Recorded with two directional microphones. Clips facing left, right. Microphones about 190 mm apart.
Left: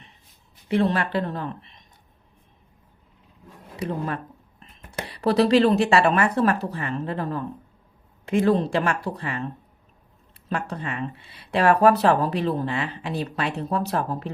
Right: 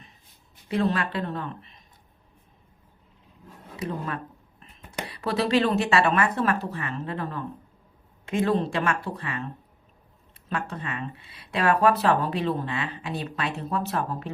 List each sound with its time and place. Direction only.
0.7 s speech: 30° left (ahead or behind)
3.8 s speech: 35° left (ahead or behind)
10.5 s speech: 35° left (ahead or behind)